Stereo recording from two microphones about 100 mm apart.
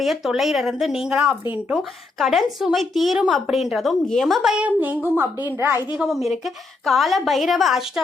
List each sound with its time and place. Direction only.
0.0 s a woman's voice: centre (ahead or behind); by 5.8 s 25° right (ahead or behind)
5.9 s a woman's voice: 5° right (ahead or behind)